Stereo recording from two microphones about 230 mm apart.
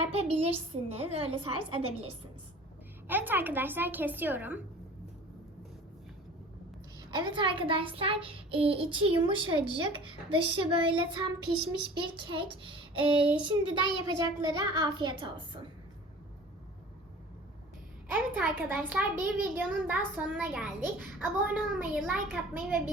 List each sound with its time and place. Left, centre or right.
0.0 s a child's voice: right
3.1 s a child's voice: centre
7.1 s a child's voice: centre
13.7 s a child's voice: centre
14.2 s a child's voice: centre
18.1 s a child's voice: centre